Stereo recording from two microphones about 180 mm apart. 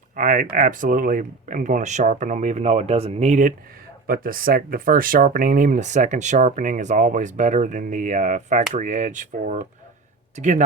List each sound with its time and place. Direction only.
0.2 s speech: 45° right (ahead or behind)
4.0 s speech: 55° right (ahead or behind)